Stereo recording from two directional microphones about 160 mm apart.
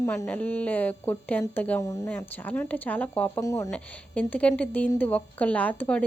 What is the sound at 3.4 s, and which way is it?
Speech, 20° left (ahead or behind).